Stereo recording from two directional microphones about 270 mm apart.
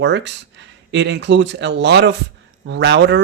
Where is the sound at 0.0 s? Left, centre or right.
Right.